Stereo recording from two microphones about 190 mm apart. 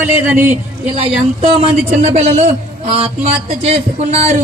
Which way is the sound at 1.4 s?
30° right (ahead or behind).